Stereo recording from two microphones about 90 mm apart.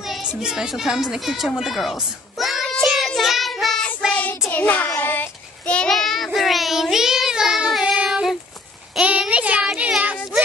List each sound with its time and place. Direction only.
0.0 s children playing: centre (ahead or behind)
0.4 s a sound: 5° right (ahead or behind)
4.5 s child singing: 15° left (ahead or behind)
5.9 s child singing: centre (ahead or behind)
9.3 s child singing: 15° right (ahead or behind)